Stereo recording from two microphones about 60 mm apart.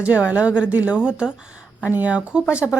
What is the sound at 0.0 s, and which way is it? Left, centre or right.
A woman's voice, centre.